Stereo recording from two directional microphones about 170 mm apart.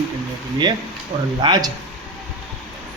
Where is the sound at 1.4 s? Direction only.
25° right (ahead or behind).